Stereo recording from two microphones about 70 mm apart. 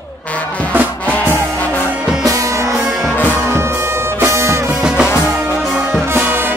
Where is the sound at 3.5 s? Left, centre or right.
Right.